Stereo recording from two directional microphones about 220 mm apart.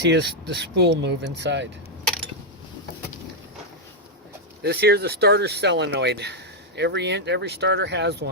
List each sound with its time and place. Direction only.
0.0 s speech: 50° right (ahead or behind)
4.6 s speech: 45° right (ahead or behind)